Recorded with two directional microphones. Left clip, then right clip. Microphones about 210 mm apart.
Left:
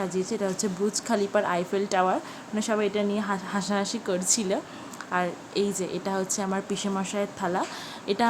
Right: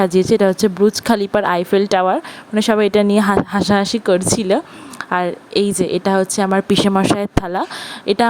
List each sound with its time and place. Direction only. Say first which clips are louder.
0.0 s a woman's voice: right 15 dB; 45° right (ahead or behind)